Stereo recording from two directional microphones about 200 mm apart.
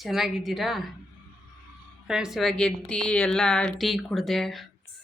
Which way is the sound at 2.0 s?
5° right (ahead or behind).